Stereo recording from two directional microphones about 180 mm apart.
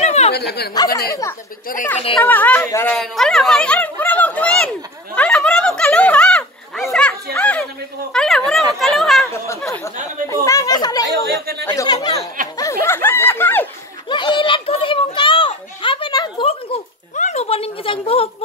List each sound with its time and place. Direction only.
0.0 s a sound: 35° left (ahead or behind)
0.3 s speech: 60° left (ahead or behind)
1.7 s a woman's voice: 50° left (ahead or behind)
2.2 s speech: 10° left (ahead or behind)
5.1 s a sound: 5° left (ahead or behind)
8.1 s speech: 5° left (ahead or behind)
8.7 s chatter: centre (ahead or behind)
10.3 s speech: 15° left (ahead or behind)
12.5 s snicker: 15° left (ahead or behind)
14.0 s a sound: 25° left (ahead or behind)